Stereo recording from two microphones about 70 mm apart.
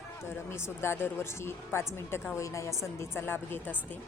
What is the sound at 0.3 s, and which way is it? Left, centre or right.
Speech, left.